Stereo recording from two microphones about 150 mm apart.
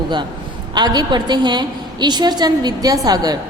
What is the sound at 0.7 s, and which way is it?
A woman's voice, 30° right (ahead or behind).